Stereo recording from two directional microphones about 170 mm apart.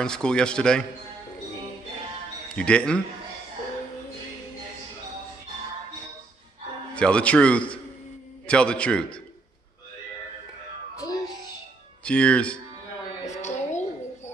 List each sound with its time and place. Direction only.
0.0 s speech: 5° left (ahead or behind)
2.5 s speech: 5° left (ahead or behind)
7.0 s a man's voice: 5° left (ahead or behind)
12.0 s a man's voice: 5° left (ahead or behind)
13.2 s a sound: 45° left (ahead or behind)